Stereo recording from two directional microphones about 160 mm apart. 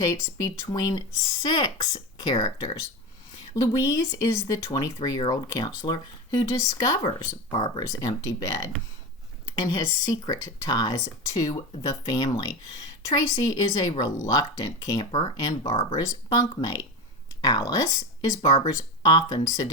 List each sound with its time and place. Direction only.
0.1 s speech: 20° left (ahead or behind)
3.5 s speech: 20° left (ahead or behind)
9.6 s speech: 25° left (ahead or behind)